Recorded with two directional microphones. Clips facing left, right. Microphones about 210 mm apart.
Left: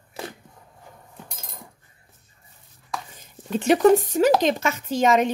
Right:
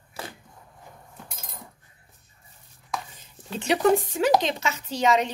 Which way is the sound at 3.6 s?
40° left (ahead or behind).